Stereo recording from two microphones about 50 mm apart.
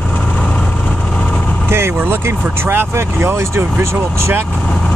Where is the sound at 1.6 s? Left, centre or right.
Right.